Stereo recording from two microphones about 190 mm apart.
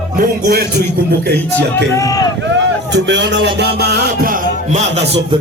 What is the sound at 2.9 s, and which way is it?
Music, 70° right (ahead or behind).